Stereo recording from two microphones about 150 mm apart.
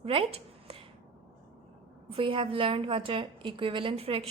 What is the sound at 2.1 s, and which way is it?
A woman's voice, 35° right (ahead or behind).